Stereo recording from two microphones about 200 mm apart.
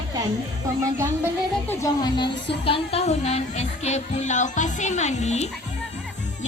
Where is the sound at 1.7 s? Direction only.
20° left (ahead or behind).